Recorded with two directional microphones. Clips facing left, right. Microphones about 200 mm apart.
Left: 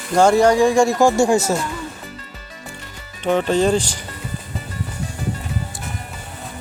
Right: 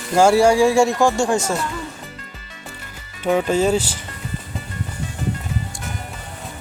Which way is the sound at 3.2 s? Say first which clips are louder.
Left 1 dB; 5° right (ahead or behind).